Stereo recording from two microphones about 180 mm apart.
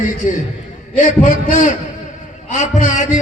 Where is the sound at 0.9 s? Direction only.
45° left (ahead or behind).